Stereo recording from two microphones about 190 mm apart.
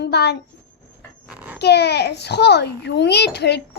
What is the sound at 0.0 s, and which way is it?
Speech, 60° left (ahead or behind).